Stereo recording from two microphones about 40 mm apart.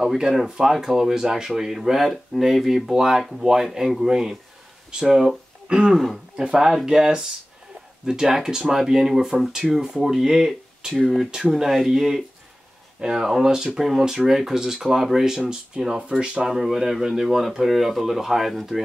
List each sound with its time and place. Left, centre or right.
0.0 s a man's voice: centre